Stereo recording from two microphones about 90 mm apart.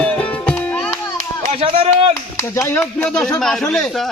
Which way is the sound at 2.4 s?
30° left (ahead or behind).